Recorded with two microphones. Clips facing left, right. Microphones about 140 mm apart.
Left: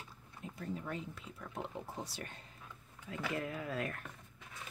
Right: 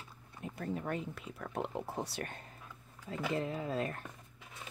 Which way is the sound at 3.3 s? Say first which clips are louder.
Right 4 dB; 25° right (ahead or behind).